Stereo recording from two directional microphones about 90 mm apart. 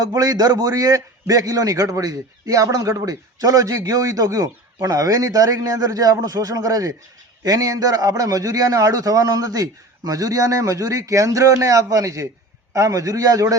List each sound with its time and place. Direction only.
0.0 s a man's voice: 45° right (ahead or behind)